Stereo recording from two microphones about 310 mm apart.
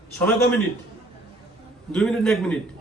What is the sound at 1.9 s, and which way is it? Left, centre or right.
Speech, centre.